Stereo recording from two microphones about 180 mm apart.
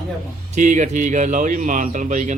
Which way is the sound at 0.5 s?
45° right (ahead or behind).